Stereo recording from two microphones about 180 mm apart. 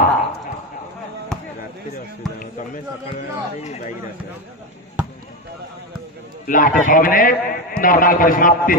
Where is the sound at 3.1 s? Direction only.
40° left (ahead or behind).